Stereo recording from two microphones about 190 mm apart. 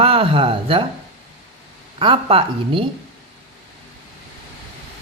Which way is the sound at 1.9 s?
30° right (ahead or behind).